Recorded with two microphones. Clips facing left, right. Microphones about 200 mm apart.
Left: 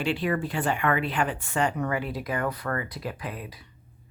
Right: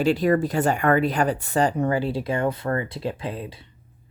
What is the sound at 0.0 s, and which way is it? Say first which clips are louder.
Speech: right 7 dB; 40° right (ahead or behind).